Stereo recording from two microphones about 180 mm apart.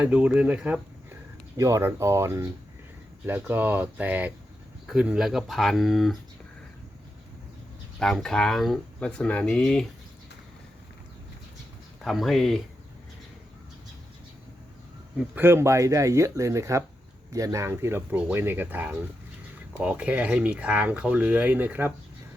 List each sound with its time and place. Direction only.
0.0 s speech: 5° right (ahead or behind)
1.5 s speech: 15° right (ahead or behind); by 6.1 s centre (ahead or behind)
7.9 s speech: centre (ahead or behind)
12.0 s speech: centre (ahead or behind)
15.4 s speech: 15° right (ahead or behind)